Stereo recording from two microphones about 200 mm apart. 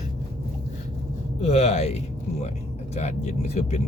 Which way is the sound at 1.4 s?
30° left (ahead or behind).